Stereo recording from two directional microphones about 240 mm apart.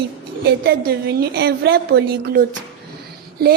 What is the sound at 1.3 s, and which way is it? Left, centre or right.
A woman's voice, right.